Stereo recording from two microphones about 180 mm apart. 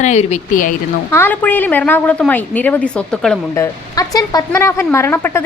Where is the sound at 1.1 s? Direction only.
10° left (ahead or behind).